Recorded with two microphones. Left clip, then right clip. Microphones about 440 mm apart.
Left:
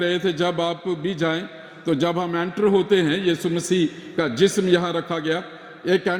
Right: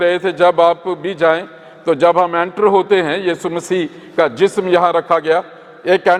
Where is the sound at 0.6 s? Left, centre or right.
Right.